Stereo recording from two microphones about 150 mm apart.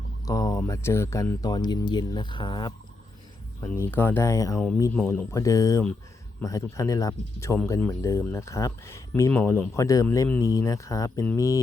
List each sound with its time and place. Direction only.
0.3 s speech: 25° left (ahead or behind)
3.6 s speech: 15° left (ahead or behind)